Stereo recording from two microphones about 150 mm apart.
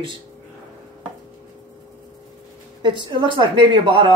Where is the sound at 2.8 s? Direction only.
30° right (ahead or behind).